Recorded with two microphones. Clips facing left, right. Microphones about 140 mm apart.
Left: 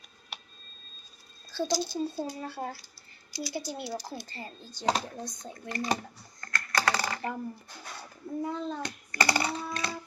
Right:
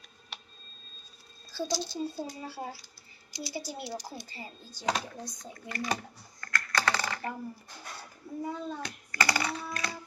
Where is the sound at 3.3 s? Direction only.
20° right (ahead or behind).